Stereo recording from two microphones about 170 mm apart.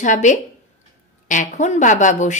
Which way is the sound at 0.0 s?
45° left (ahead or behind).